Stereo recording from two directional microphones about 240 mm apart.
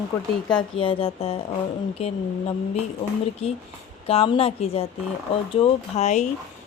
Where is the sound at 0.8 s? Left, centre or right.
Left.